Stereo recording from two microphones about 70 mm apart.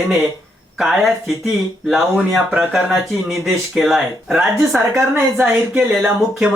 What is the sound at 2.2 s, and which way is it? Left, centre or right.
Speech, right.